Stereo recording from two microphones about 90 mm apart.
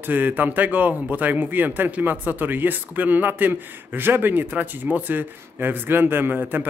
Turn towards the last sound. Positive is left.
turn(degrees=-20)  # may be behind; listen again after turning